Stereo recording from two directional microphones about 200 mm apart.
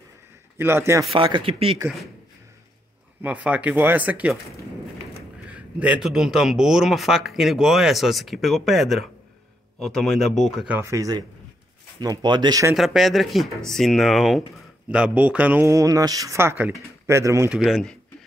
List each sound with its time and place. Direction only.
0.6 s speech: 10° right (ahead or behind)
1.1 s speech: 25° right (ahead or behind)
3.2 s speech: 5° right (ahead or behind)
5.5 s speech: 5° right (ahead or behind)
12.7 s speech: centre (ahead or behind)
17.6 s speech: centre (ahead or behind)